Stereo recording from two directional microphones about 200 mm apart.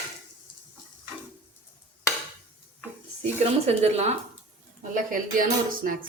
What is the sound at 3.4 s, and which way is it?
Speech, 30° right (ahead or behind).